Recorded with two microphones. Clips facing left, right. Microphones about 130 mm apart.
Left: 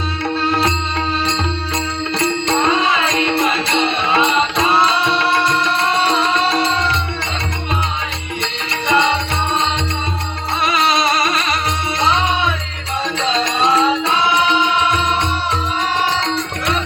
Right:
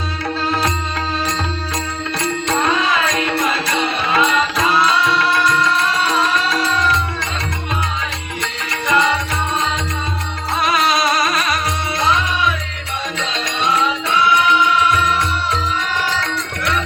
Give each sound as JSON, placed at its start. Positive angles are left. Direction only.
{"t": 2.1, "sound": "music", "side_deg": 30}
{"t": 8.7, "sound": "music", "side_deg": 25}
{"t": 10.6, "sound": "music", "side_deg": 25}